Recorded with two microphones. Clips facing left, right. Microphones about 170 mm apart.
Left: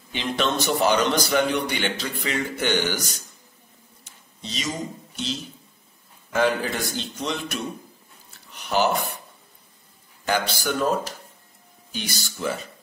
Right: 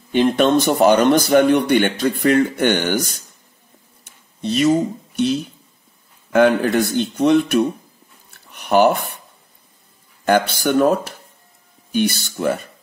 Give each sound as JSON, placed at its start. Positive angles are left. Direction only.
{"t": 0.1, "sound": "a man's voice", "side_deg": -50}
{"t": 4.4, "sound": "a man's voice", "side_deg": -60}
{"t": 8.3, "sound": "a sound", "side_deg": -55}
{"t": 10.2, "sound": "a man's voice", "side_deg": -60}